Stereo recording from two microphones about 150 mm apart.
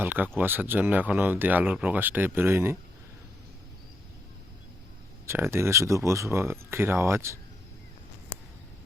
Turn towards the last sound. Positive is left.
turn(degrees=-20)  # may be behind; listen again after turning